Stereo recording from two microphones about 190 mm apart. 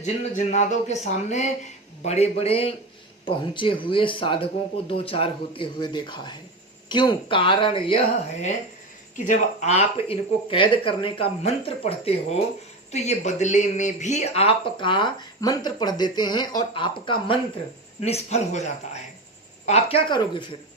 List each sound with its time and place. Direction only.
0.0 s speech: 40° left (ahead or behind)